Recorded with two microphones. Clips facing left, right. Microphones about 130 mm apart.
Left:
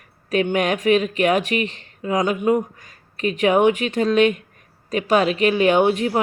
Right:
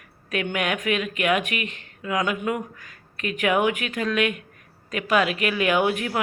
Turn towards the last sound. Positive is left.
turn(degrees=30)  # may be behind; listen again after turning